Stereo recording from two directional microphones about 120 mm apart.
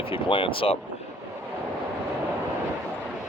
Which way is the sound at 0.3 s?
45° left (ahead or behind).